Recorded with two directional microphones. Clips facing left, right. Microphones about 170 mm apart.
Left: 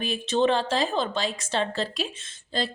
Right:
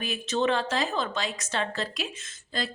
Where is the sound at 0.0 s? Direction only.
30° left (ahead or behind).